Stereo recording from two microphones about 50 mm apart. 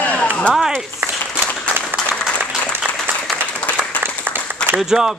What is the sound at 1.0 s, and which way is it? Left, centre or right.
Applause, right.